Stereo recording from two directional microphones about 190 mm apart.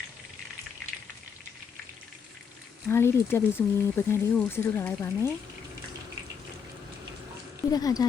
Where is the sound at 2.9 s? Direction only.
15° left (ahead or behind).